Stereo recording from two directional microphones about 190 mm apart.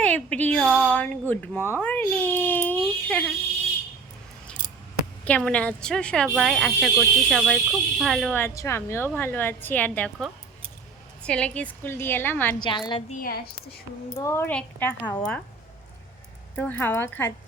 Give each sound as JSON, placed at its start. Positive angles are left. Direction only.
{"t": 0.0, "sound": "speech", "side_deg": 5}
{"t": 4.6, "sound": "scissors", "side_deg": 10}
{"t": 5.2, "sound": "speech", "side_deg": 5}
{"t": 12.5, "sound": "a woman's voice", "side_deg": 25}
{"t": 13.1, "sound": "a woman's voice", "side_deg": 50}
{"t": 14.2, "sound": "speech", "side_deg": 15}
{"t": 16.6, "sound": "speech", "side_deg": 10}